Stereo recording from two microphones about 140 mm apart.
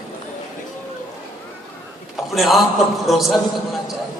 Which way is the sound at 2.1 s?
Centre (ahead or behind).